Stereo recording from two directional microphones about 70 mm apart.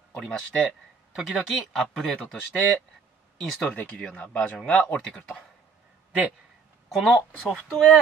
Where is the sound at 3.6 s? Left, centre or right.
Left.